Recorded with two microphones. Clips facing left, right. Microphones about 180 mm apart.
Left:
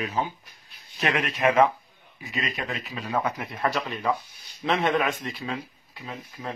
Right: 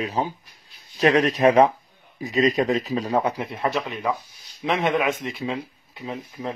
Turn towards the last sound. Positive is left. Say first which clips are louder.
# right 6 dB
turn(degrees=-20)  # may be behind; listen again after turning